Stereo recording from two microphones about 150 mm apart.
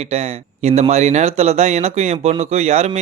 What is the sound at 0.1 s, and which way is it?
Speech, 45° right (ahead or behind).